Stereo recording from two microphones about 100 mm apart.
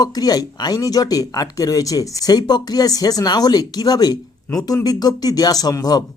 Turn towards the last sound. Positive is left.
turn(degrees=40)  # may be behind; listen again after turning